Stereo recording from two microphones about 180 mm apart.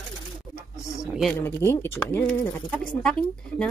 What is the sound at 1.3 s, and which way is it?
Speech, 15° left (ahead or behind).